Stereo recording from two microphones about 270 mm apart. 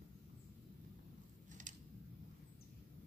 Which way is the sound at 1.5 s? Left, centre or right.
Right.